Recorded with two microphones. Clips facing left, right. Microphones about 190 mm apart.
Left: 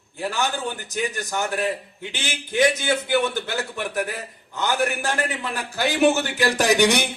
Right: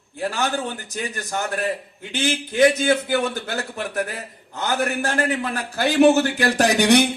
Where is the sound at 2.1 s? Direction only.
55° right (ahead or behind).